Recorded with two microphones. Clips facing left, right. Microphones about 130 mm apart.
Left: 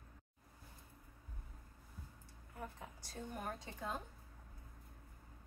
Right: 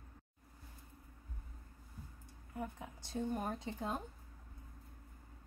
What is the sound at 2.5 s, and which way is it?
A woman's voice, 20° right (ahead or behind).